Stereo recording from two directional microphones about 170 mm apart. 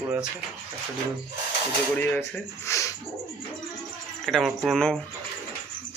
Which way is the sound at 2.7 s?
20° left (ahead or behind).